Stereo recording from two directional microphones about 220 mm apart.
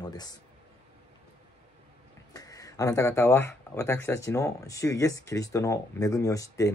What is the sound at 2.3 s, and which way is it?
Speech, 15° left (ahead or behind).